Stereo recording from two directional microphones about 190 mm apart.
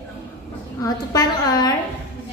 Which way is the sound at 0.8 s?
20° left (ahead or behind).